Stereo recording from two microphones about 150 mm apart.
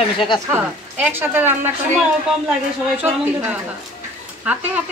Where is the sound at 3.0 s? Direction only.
10° right (ahead or behind).